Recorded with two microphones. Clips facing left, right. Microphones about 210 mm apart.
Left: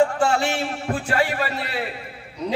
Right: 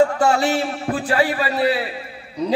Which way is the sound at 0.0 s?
40° right (ahead or behind).